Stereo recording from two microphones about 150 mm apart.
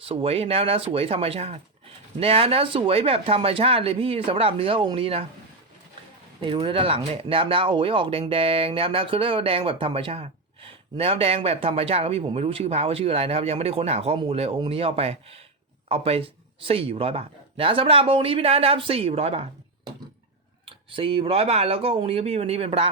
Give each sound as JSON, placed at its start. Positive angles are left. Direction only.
{"t": 0.0, "sound": "speech", "side_deg": -40}
{"t": 6.4, "sound": "speech", "side_deg": -35}
{"t": 20.7, "sound": "speech", "side_deg": -35}